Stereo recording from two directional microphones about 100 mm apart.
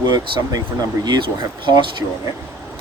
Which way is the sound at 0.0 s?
45° right (ahead or behind).